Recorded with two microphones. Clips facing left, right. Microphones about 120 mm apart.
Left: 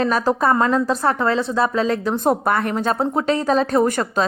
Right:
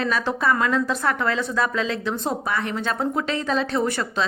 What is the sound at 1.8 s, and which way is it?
A woman's voice, 45° left (ahead or behind).